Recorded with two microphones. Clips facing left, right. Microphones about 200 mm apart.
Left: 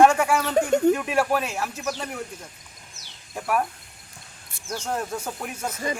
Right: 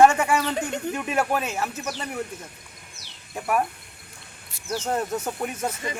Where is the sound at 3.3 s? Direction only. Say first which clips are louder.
Even; 5° right (ahead or behind).